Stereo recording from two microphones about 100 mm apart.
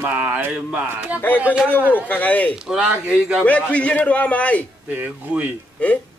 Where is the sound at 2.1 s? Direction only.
15° left (ahead or behind).